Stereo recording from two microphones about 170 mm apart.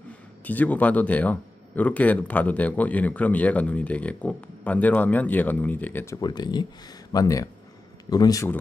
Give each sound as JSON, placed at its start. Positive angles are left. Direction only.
{"t": 0.5, "sound": "speech", "side_deg": 10}
{"t": 6.2, "sound": "speech", "side_deg": 25}